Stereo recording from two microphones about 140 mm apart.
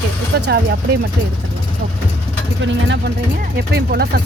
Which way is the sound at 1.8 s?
90° right.